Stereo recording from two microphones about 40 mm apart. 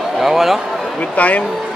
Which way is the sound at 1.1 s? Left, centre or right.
Left.